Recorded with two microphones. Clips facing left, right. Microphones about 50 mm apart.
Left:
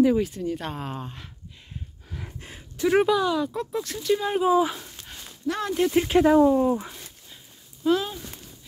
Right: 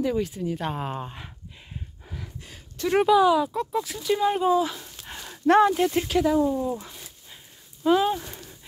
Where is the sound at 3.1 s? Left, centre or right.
Centre.